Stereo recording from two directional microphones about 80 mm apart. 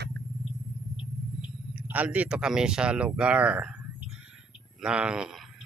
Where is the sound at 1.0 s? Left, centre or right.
Left.